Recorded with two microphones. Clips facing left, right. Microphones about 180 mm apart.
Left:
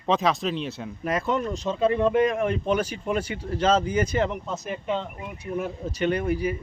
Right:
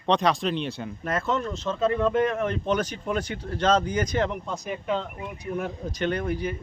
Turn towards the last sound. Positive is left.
turn(degrees=5)  # may be behind; listen again after turning